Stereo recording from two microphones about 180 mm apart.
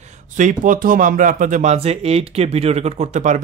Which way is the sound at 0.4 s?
45° right (ahead or behind).